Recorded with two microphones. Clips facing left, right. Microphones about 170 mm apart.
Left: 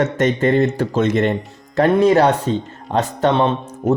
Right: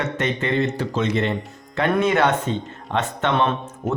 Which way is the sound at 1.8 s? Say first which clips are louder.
Left 6 dB; 35° left (ahead or behind).